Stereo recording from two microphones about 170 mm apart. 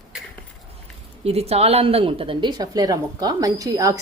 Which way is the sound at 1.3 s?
35° right (ahead or behind).